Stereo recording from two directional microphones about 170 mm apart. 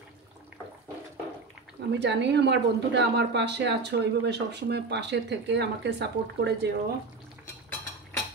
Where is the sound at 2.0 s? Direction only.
90° right.